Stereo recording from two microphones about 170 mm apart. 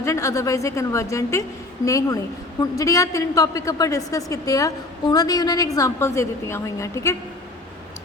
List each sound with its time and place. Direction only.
0.0 s a woman's voice: 20° left (ahead or behind)